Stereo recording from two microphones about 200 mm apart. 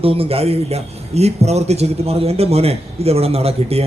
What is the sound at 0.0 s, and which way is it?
A man's voice, 30° right (ahead or behind).